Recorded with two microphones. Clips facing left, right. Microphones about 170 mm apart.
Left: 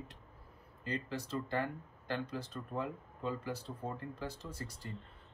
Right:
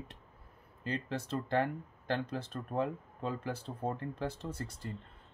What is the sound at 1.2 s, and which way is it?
Speech, 60° right (ahead or behind).